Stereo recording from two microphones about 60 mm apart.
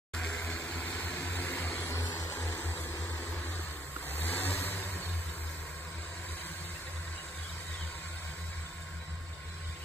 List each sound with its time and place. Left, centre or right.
0.8 s vehicle: left
2.2 s a sound: left
4.1 s vehicle: left